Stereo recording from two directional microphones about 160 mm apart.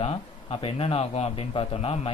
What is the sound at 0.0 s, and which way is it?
A man's voice, 35° left (ahead or behind).